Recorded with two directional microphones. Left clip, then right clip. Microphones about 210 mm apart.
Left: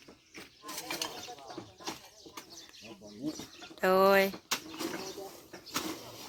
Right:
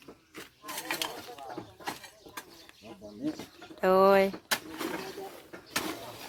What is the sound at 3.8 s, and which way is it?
Speech, centre (ahead or behind).